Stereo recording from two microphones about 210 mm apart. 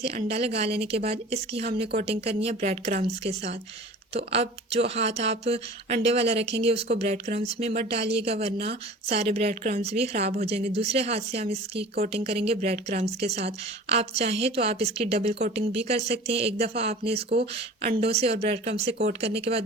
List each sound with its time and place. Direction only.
0.0 s speech: 30° right (ahead or behind)
4.3 s speech: 30° right (ahead or behind)
6.4 s speech: 55° right (ahead or behind)
6.7 s speech: 30° right (ahead or behind)
9.5 s speech: 45° right (ahead or behind)
9.8 s speech: 30° right (ahead or behind)
11.8 s speech: 45° right (ahead or behind)
12.1 s speech: 30° right (ahead or behind)
17.2 s speech: 50° right (ahead or behind)
18.0 s speech: 30° right (ahead or behind)